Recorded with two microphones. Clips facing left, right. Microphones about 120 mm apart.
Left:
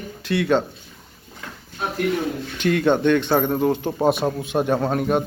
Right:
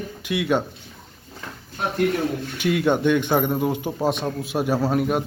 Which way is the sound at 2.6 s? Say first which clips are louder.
Left 2 dB; 10° right (ahead or behind).